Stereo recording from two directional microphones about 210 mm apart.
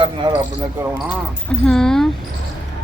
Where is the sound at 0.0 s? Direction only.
20° right (ahead or behind).